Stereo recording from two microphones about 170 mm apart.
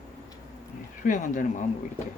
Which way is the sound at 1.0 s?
50° left (ahead or behind).